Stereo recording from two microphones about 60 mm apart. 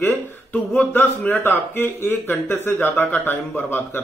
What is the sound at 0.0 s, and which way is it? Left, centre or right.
Speech, left.